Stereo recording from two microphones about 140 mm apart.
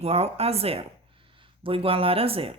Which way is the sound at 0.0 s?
45° right (ahead or behind).